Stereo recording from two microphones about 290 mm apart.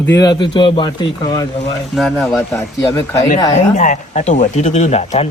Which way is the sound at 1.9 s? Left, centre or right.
Centre.